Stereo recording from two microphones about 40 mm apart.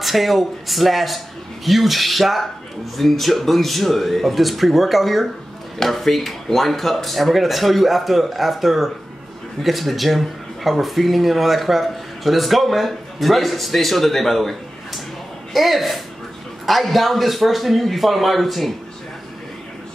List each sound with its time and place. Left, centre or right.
0.0 s speech: centre